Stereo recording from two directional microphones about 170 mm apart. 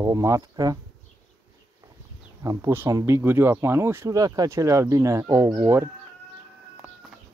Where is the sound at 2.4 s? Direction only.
15° right (ahead or behind).